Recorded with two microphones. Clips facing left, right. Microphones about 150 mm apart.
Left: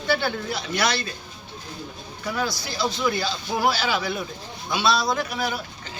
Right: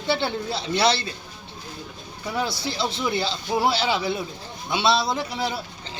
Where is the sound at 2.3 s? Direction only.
25° right (ahead or behind).